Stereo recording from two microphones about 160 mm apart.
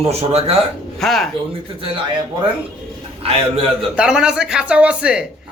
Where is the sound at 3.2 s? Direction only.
35° right (ahead or behind).